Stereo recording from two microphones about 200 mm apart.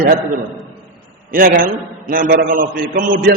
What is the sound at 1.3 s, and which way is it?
A man's voice, 45° right (ahead or behind).